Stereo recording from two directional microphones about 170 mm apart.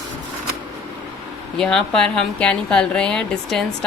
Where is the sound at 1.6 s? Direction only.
5° left (ahead or behind).